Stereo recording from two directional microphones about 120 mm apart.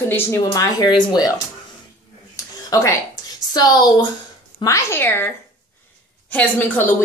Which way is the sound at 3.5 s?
35° left (ahead or behind).